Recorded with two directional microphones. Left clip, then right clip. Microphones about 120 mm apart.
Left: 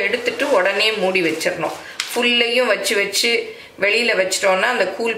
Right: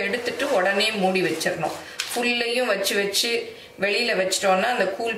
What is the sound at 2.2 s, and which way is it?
Speech, 20° left (ahead or behind).